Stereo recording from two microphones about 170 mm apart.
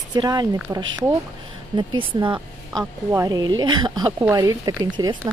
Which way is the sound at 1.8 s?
30° right (ahead or behind).